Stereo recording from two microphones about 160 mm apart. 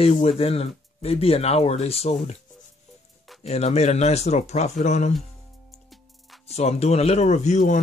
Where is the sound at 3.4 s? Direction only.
45° left (ahead or behind).